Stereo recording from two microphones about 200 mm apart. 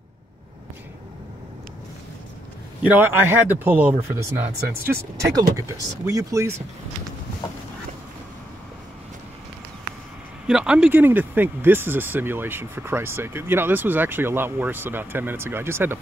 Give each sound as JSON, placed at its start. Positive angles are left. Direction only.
{"t": 2.8, "sound": "speech", "side_deg": -10}
{"t": 10.4, "sound": "speech", "side_deg": -5}